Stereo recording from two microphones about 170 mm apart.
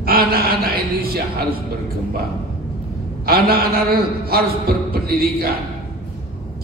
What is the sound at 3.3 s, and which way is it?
Speech, 65° right (ahead or behind).